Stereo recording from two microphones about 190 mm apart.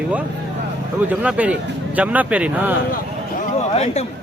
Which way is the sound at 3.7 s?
35° left (ahead or behind).